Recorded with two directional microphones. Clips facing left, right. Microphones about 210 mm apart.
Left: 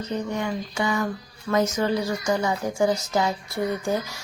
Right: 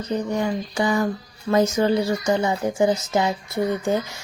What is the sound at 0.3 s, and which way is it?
A woman's voice, 35° right (ahead or behind).